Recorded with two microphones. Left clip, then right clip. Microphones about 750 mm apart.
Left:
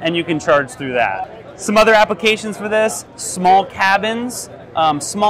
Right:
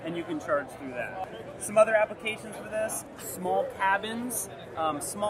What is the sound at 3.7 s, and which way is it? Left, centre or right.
Speech, left.